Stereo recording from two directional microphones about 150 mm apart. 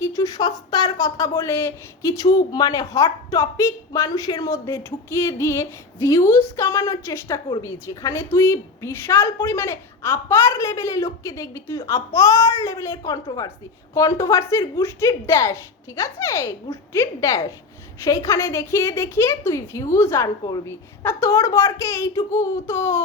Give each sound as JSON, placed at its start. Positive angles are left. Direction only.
{"t": 0.0, "sound": "speech", "side_deg": 20}